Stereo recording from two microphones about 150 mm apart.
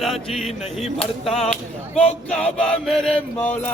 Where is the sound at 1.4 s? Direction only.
5° left (ahead or behind).